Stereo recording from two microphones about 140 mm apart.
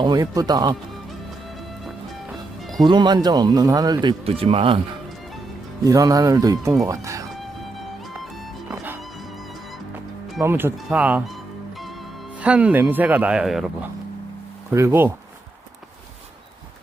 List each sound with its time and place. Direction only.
0.0 s speech: 30° right (ahead or behind)
2.8 s speech: 30° right (ahead or behind)
4.3 s speech: 45° right (ahead or behind)
5.8 s speech: 25° right (ahead or behind)
7.4 s music: centre (ahead or behind)
8.7 s music: 15° right (ahead or behind)
10.4 s speech: 15° right (ahead or behind)
12.4 s speech: 10° right (ahead or behind)
14.7 s speech: 20° right (ahead or behind)